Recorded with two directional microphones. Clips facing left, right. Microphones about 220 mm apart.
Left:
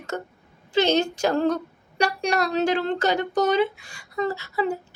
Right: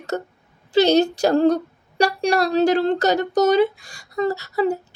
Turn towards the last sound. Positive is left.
turn(degrees=-40)  # may be behind; listen again after turning